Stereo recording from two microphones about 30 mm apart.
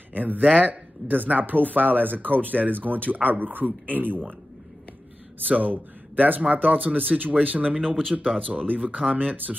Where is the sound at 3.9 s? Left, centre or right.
Right.